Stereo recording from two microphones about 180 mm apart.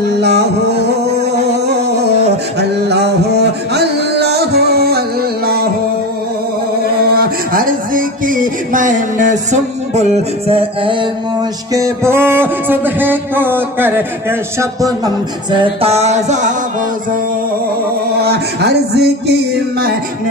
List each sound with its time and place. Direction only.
0.2 s music: 65° right (ahead or behind)
3.7 s music: 65° right (ahead or behind)
7.2 s music: 50° right (ahead or behind)
10.5 s music: 30° right (ahead or behind)
11.7 s music: 15° right (ahead or behind)
15.8 s music: 35° right (ahead or behind)
18.2 s music: 65° right (ahead or behind)